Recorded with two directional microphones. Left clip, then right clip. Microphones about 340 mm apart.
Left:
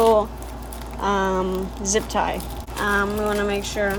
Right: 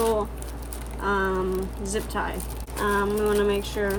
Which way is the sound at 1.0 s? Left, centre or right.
Centre.